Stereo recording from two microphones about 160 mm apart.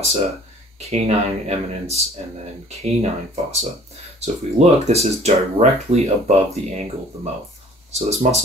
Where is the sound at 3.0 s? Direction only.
40° right (ahead or behind).